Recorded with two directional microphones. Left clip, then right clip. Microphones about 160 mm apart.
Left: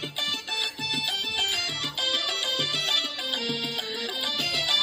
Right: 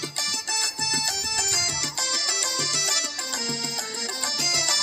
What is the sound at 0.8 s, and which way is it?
Music, 45° right (ahead or behind).